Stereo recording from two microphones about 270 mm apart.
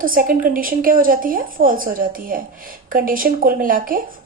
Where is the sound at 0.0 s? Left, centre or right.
Right.